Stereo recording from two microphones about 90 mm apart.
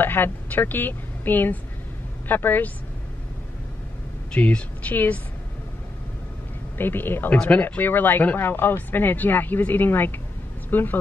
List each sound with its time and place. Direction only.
0.0 s a woman's voice: 25° left (ahead or behind)
4.3 s speech: 10° left (ahead or behind)
6.8 s speech: 25° left (ahead or behind)